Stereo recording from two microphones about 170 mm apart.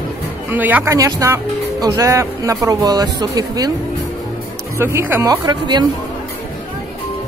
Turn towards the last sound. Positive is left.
turn(degrees=-25)  # may be behind; listen again after turning